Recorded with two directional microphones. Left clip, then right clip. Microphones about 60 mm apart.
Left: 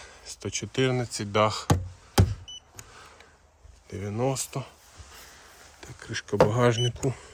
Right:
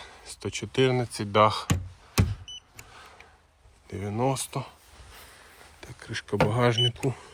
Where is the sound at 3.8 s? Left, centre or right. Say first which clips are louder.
Right 1 dB; left.